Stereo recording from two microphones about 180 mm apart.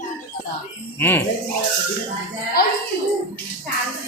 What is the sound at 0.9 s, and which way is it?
Speech, 10° left (ahead or behind).